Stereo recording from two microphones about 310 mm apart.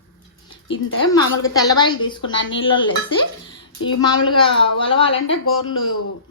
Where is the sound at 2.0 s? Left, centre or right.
Centre.